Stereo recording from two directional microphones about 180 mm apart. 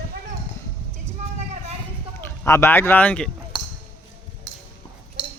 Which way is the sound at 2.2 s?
15° left (ahead or behind).